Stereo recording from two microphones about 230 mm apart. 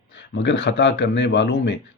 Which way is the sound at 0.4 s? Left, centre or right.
Left.